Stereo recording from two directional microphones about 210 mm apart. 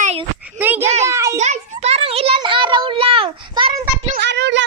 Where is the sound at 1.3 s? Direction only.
35° right (ahead or behind).